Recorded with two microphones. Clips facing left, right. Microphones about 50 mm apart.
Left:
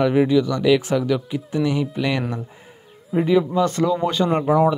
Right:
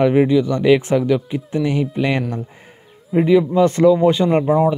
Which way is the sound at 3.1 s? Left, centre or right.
Centre.